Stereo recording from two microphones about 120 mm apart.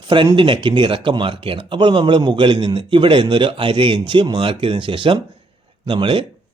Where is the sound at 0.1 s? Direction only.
45° right (ahead or behind).